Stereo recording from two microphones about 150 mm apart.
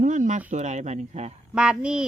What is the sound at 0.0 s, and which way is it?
Speech, 55° right (ahead or behind).